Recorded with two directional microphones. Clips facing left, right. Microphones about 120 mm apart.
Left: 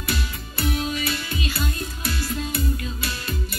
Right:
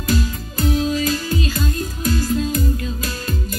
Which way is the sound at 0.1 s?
35° right (ahead or behind).